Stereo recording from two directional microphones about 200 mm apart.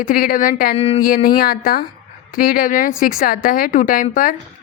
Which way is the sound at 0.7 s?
30° left (ahead or behind).